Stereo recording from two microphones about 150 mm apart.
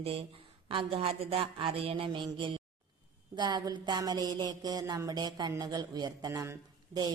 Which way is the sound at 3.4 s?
30° right (ahead or behind).